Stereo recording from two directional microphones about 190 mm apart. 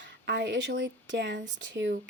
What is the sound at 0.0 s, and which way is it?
Speech, 65° right (ahead or behind).